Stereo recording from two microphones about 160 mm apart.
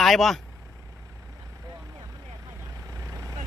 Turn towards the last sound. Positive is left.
turn(degrees=-20)  # may be behind; listen again after turning